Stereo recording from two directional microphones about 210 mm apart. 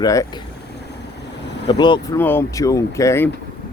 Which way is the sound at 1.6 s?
20° left (ahead or behind).